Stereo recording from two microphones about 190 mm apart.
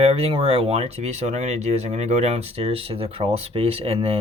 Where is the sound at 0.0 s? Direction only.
35° right (ahead or behind).